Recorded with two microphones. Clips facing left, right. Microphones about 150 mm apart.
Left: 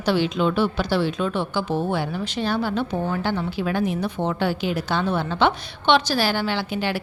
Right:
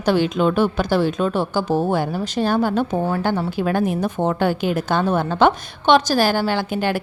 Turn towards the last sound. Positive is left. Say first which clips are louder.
# right 4 dB
turn(degrees=-50)  # may be behind; listen again after turning